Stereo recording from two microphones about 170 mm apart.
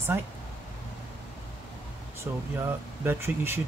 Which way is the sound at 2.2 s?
15° right (ahead or behind).